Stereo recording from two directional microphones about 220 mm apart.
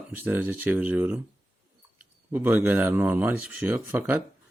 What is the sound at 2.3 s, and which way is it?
Speech, 10° right (ahead or behind).